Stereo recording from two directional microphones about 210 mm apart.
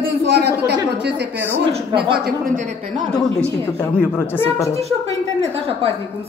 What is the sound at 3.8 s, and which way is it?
A man's voice, 5° left (ahead or behind).